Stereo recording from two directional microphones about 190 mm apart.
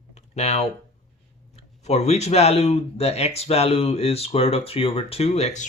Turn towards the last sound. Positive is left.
turn(degrees=35)  # may be behind; listen again after turning